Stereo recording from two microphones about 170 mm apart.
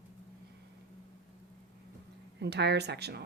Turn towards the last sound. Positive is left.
turn(degrees=-75)  # may be behind; listen again after turning